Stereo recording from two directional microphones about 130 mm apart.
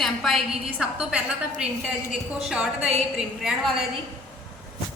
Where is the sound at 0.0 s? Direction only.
Centre (ahead or behind).